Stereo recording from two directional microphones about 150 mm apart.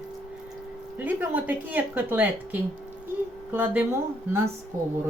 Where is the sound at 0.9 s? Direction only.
10° right (ahead or behind).